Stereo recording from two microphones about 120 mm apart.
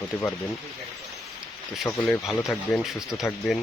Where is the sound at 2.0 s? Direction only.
Centre (ahead or behind).